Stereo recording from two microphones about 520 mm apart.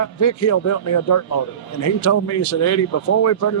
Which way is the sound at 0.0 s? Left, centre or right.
Left.